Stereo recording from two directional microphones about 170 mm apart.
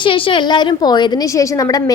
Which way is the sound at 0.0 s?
30° left (ahead or behind).